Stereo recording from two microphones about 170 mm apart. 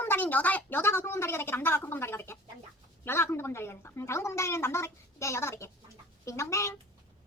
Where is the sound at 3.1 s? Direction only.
15° left (ahead or behind).